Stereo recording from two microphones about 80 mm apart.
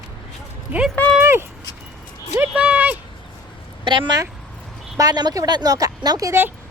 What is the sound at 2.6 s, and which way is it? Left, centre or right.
Speech, centre.